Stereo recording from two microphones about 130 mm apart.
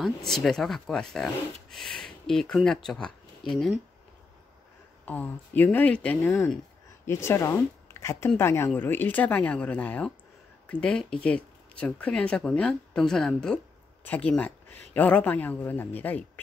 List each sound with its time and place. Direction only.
0.0 s speech: 5° left (ahead or behind)
5.0 s speech: 10° left (ahead or behind)
6.2 s speech: 20° left (ahead or behind)